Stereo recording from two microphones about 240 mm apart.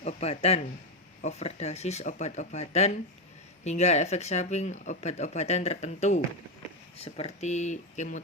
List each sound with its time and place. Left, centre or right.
0.0 s speech: left